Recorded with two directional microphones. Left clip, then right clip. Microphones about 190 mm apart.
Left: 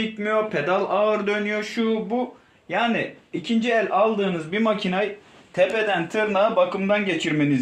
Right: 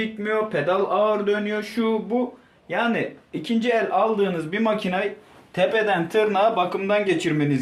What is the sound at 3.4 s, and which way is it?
Speech, 45° left (ahead or behind).